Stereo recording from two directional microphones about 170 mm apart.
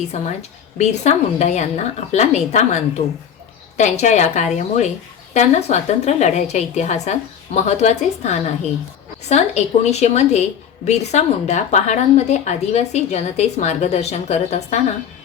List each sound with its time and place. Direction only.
0.1 s a woman's voice: 45° left (ahead or behind)